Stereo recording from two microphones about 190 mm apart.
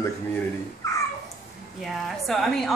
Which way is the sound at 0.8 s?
15° left (ahead or behind).